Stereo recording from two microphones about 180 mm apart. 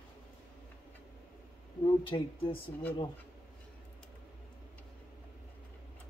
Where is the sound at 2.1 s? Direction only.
25° left (ahead or behind).